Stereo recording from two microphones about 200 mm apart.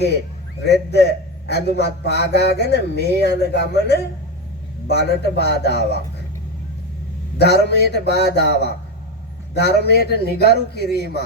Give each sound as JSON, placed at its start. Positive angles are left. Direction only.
{"t": 0.6, "sound": "a man's voice", "side_deg": 55}
{"t": 7.3, "sound": "a man's voice", "side_deg": 55}